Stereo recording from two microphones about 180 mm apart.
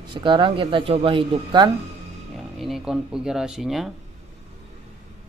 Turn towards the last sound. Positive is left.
turn(degrees=0)  # may be behind; listen again after turning